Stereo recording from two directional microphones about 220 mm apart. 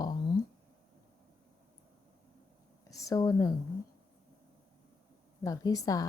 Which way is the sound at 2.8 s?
15° left (ahead or behind).